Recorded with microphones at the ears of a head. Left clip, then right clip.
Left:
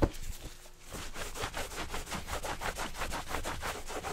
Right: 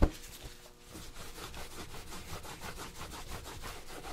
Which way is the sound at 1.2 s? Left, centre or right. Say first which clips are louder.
Left 9 dB; left.